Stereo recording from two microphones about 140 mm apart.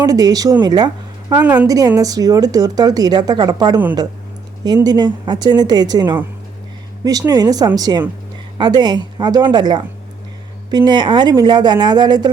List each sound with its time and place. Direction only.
0.0 s speech: 25° right (ahead or behind)
1.3 s a woman's voice: 10° right (ahead or behind)
1.6 s speech: 25° right (ahead or behind)